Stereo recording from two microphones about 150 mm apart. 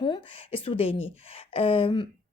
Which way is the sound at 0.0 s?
40° left (ahead or behind).